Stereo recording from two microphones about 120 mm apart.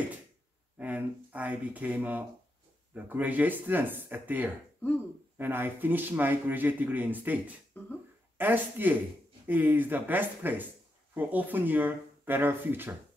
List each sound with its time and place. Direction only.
0.7 s speech: 10° right (ahead or behind)
7.7 s speech: 15° left (ahead or behind)
8.4 s speech: 15° right (ahead or behind)